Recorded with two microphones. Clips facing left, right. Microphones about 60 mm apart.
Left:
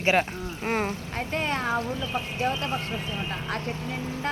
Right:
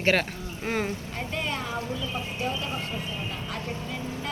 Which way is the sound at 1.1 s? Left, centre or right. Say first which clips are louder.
Left 3 dB; left.